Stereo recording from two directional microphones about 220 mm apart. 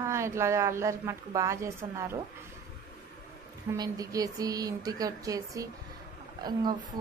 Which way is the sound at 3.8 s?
15° right (ahead or behind).